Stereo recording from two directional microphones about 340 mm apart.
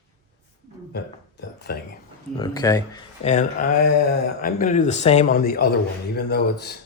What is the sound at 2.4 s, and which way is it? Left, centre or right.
Speech, centre.